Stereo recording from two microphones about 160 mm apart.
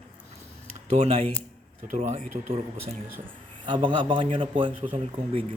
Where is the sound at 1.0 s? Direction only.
40° right (ahead or behind).